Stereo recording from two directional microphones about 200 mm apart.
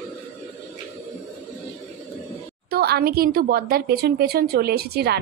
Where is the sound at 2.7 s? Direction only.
50° right (ahead or behind).